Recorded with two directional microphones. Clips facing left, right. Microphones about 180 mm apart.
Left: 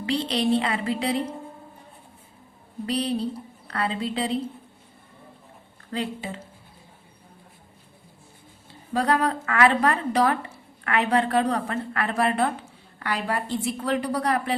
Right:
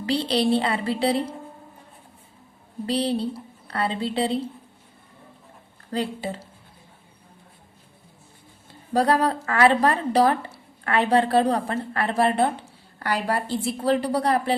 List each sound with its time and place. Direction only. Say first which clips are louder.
0.0 s a woman's voice: right 2 dB; 35° right (ahead or behind)
2.8 s a woman's voice: right 2 dB; 30° right (ahead or behind)
5.9 s a woman's voice: right 3 dB; 35° right (ahead or behind)
8.9 s a woman's voice: right 2 dB; 35° right (ahead or behind)